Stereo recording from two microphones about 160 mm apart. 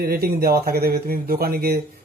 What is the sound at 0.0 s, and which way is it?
Speech, 70° right (ahead or behind).